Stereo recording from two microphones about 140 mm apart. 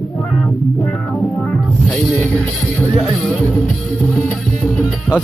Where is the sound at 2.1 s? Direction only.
5° left (ahead or behind).